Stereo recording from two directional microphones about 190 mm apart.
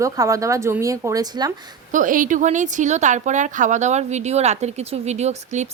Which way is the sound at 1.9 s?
45° right (ahead or behind).